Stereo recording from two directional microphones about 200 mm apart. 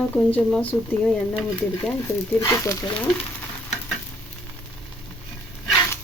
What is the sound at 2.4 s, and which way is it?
Speech, 15° left (ahead or behind).